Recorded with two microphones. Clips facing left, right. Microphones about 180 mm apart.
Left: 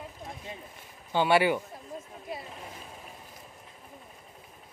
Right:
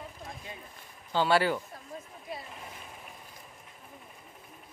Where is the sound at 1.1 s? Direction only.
15° left (ahead or behind).